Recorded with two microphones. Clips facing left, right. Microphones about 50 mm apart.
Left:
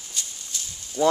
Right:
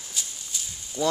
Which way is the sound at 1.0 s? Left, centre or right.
Centre.